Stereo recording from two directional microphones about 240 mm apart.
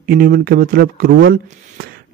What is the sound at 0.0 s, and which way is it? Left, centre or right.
A man's voice, right.